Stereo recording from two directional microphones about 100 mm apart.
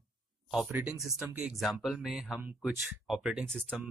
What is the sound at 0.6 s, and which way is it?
Speech, 15° right (ahead or behind).